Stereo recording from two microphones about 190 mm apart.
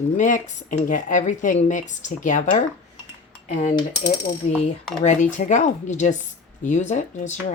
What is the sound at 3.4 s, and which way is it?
Cutlery, 40° left (ahead or behind).